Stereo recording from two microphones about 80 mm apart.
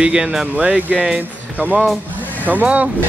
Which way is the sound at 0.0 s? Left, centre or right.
Centre.